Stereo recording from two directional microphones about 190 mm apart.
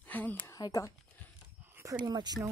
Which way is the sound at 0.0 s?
10° left (ahead or behind).